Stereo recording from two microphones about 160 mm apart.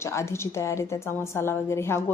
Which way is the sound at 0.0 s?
15° left (ahead or behind).